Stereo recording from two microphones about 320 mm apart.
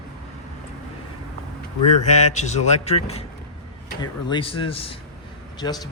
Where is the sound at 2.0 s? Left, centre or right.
Left.